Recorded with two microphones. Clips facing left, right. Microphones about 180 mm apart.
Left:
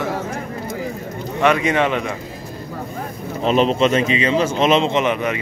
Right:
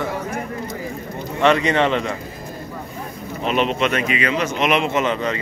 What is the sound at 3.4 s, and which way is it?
A man's voice, 35° left (ahead or behind).